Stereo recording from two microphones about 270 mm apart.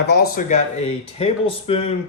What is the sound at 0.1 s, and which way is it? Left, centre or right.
Speech, left.